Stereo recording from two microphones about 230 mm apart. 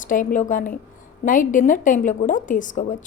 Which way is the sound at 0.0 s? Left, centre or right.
Left.